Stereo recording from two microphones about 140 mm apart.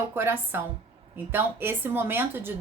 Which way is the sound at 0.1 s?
15° right (ahead or behind).